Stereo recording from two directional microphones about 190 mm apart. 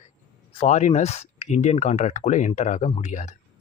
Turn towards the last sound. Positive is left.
turn(degrees=40)  # may be behind; listen again after turning